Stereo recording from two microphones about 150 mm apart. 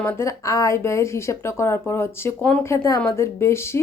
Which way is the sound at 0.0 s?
15° left (ahead or behind).